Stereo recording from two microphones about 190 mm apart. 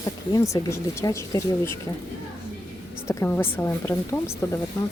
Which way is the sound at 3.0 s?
15° left (ahead or behind).